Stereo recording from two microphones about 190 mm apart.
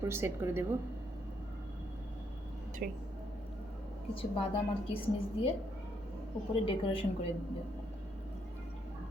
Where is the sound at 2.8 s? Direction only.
50° right (ahead or behind).